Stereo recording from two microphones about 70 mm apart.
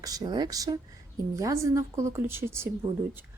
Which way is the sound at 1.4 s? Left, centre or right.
Right.